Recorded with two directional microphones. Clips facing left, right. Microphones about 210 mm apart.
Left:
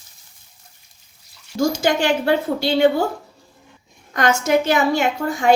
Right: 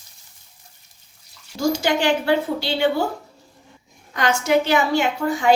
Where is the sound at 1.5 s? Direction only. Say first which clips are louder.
Left 2 dB; 50° left (ahead or behind).